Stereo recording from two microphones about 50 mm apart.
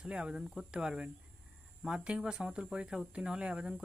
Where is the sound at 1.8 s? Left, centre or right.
Centre.